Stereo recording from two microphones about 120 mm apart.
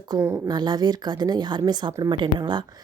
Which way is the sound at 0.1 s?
35° right (ahead or behind).